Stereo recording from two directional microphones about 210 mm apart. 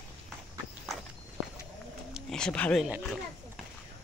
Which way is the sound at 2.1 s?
5° left (ahead or behind).